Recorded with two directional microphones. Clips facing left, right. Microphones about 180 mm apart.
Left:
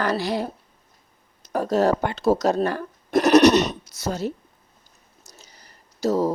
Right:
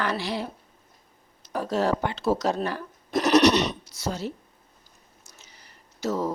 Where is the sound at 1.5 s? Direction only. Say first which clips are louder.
Left 5 dB; 45° left (ahead or behind).